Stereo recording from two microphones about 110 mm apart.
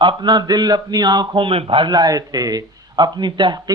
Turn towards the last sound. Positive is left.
turn(degrees=-45)  # may be behind; listen again after turning